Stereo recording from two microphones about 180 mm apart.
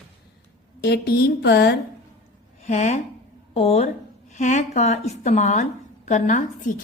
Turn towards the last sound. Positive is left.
turn(degrees=45)  # may be behind; listen again after turning